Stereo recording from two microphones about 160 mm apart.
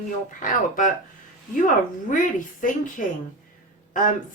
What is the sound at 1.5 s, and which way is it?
A woman's voice, 55° left (ahead or behind).